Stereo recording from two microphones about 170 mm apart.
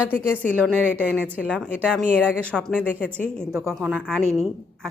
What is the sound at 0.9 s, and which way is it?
Speech, 10° right (ahead or behind).